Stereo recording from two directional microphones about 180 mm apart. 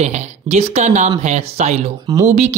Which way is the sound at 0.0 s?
40° right (ahead or behind).